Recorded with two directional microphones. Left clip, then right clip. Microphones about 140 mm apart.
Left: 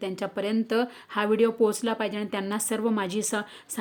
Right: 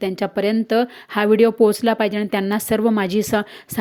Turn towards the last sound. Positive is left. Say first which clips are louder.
# right 9 dB
turn(degrees=-35)  # may be behind; listen again after turning